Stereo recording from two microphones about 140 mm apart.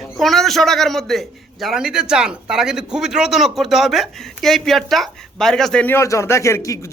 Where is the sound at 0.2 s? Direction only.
Centre (ahead or behind).